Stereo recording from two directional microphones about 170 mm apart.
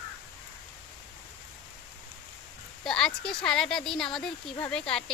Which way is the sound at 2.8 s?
5° left (ahead or behind).